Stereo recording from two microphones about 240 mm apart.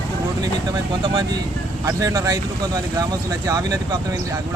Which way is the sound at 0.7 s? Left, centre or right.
Centre.